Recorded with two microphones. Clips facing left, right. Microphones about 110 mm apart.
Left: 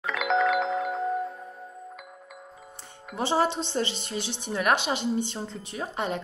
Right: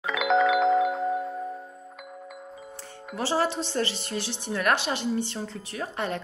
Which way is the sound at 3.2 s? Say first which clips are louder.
Left 1 dB; 20° left (ahead or behind).